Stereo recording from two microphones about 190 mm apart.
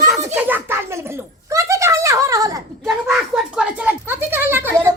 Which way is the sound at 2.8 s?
5° right (ahead or behind).